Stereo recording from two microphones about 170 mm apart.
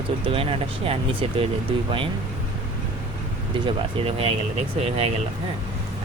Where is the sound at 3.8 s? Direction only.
35° right (ahead or behind).